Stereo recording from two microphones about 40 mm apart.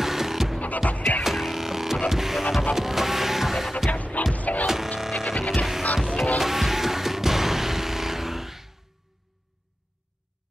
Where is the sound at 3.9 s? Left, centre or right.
Left.